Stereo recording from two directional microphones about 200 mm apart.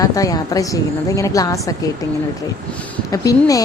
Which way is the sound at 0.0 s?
15° left (ahead or behind).